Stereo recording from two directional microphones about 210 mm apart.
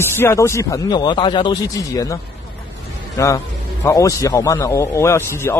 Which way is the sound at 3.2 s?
15° left (ahead or behind).